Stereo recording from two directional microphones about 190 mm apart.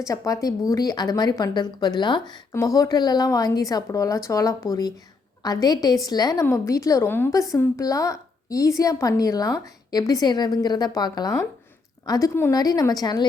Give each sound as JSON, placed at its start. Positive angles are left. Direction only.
{"t": 0.1, "sound": "a woman's voice", "side_deg": 20}